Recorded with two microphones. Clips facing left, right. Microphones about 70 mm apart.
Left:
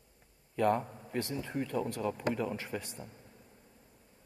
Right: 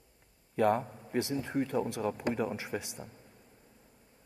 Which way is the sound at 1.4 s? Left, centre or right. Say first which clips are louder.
Right 3 dB; right.